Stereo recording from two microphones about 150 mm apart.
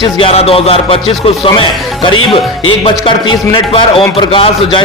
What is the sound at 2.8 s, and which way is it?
Speech, 35° left (ahead or behind).